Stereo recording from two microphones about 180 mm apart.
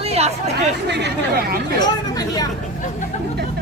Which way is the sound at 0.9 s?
65° right (ahead or behind).